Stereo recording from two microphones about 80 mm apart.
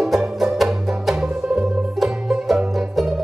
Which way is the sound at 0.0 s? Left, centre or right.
Centre.